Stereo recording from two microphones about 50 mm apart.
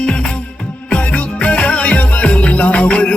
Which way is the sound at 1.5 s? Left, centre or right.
Left.